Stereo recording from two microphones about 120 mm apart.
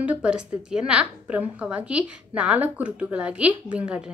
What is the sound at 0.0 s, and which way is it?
A woman's voice, 10° right (ahead or behind).